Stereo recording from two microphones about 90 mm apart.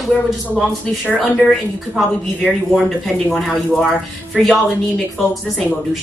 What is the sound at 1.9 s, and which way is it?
Speech, centre (ahead or behind).